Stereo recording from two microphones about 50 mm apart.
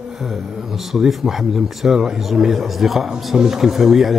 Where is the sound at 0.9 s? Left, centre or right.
Centre.